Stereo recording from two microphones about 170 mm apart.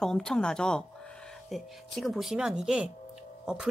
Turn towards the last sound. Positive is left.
turn(degrees=-5)  # may be behind; listen again after turning